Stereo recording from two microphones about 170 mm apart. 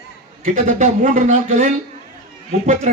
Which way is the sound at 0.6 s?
50° right (ahead or behind).